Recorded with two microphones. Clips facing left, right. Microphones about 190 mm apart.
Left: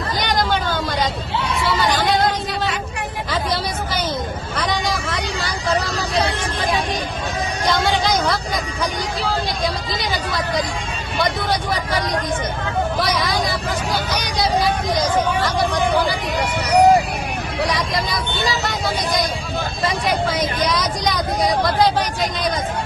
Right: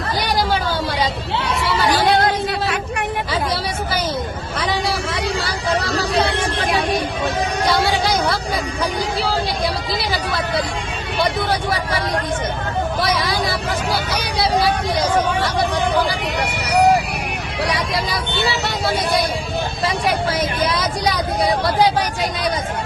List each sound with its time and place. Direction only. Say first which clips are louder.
0.3 s a sound: even; 10° right (ahead or behind)
1.3 s chatter: even; 70° right (ahead or behind)
2.0 s a sound: right 2 dB; 60° right (ahead or behind)
4.5 s vehicle: right 1 dB; centre (ahead or behind)
6.2 s vehicle: right 2 dB; 70° right (ahead or behind)
7.7 s music: left 1 dB; 5° right (ahead or behind)
13.9 s hubbub: right 1 dB; 5° right (ahead or behind)
20.7 s vehicle: right 1 dB; 5° right (ahead or behind)